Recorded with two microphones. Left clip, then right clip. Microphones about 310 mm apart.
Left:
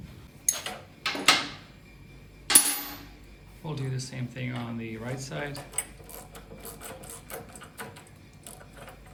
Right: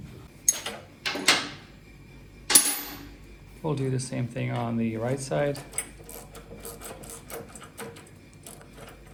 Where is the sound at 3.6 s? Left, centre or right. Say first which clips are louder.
Right 8 dB; centre.